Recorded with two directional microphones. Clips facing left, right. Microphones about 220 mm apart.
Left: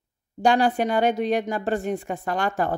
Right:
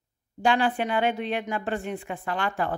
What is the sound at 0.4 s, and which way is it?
Speech, 40° left (ahead or behind).